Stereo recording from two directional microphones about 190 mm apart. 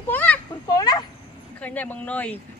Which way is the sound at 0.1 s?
10° left (ahead or behind).